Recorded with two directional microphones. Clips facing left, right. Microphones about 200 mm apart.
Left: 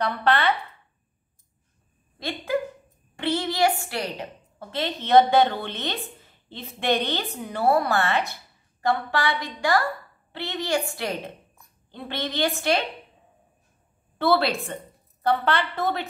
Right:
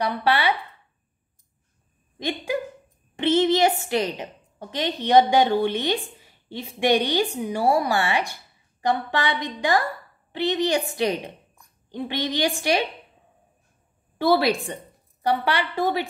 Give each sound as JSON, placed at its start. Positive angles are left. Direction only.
{"t": 0.0, "sound": "a woman's voice", "side_deg": -10}
{"t": 2.1, "sound": "a woman's voice", "side_deg": -15}
{"t": 14.1, "sound": "a woman's voice", "side_deg": -15}